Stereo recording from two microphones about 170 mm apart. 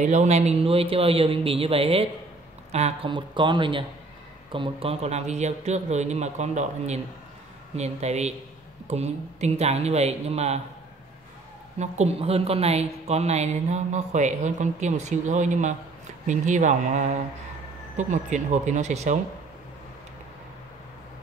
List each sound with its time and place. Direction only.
0.0 s a woman's voice: 45° right (ahead or behind)
11.8 s a woman's voice: 40° right (ahead or behind)